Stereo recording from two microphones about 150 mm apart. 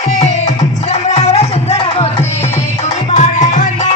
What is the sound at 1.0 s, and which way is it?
Music, 45° left (ahead or behind).